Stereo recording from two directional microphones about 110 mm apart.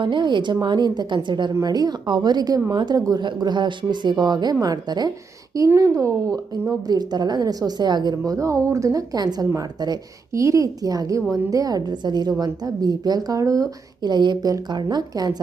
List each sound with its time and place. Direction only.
0.0 s a woman's voice: 45° right (ahead or behind)
5.5 s a woman's voice: 25° right (ahead or behind)